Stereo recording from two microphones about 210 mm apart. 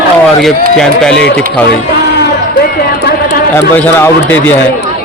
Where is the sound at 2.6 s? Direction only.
50° left (ahead or behind).